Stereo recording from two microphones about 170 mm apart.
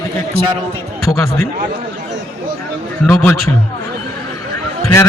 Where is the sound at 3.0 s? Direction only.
10° left (ahead or behind).